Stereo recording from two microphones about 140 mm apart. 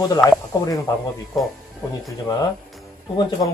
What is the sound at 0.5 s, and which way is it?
Speech, 25° left (ahead or behind).